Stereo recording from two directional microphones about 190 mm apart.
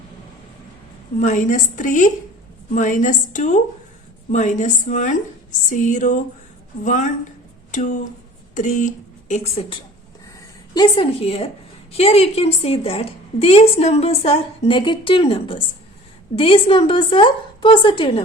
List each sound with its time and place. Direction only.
1.2 s a woman's voice: 40° left (ahead or behind)
10.8 s a woman's voice: 30° left (ahead or behind)